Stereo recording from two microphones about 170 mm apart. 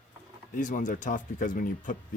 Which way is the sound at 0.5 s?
50° left (ahead or behind).